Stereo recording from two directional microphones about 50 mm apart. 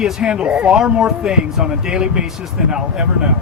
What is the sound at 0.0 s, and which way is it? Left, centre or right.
Speech, centre.